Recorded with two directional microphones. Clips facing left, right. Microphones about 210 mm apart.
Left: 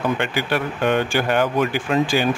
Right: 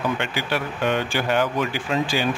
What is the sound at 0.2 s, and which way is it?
Speech, 50° left (ahead or behind).